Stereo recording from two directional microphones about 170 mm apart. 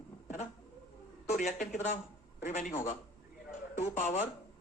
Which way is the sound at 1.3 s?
45° left (ahead or behind).